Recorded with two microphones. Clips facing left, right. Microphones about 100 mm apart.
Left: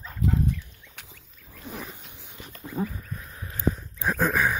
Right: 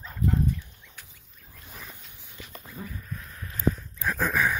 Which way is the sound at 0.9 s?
90° left.